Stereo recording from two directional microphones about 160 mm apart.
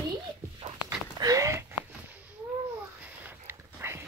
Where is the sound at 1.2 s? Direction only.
20° right (ahead or behind).